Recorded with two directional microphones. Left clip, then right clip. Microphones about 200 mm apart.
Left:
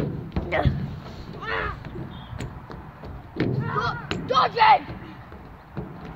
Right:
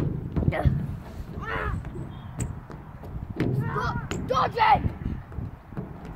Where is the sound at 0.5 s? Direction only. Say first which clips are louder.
Left 5 dB; 35° left (ahead or behind).